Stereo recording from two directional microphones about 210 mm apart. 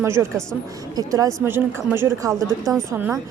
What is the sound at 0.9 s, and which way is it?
A woman's voice, 15° right (ahead or behind).